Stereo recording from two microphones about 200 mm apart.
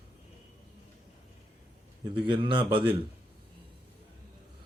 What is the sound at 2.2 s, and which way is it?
Speech, 25° right (ahead or behind).